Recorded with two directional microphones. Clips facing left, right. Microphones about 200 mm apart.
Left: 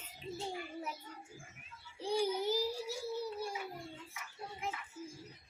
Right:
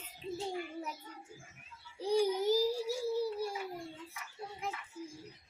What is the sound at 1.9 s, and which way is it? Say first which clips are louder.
Speech: right 4 dB; 40° right (ahead or behind).